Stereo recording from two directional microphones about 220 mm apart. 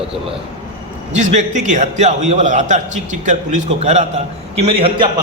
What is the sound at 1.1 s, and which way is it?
A man's voice, 30° right (ahead or behind).